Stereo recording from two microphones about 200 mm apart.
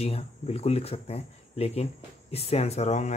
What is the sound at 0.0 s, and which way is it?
Speech, 30° left (ahead or behind).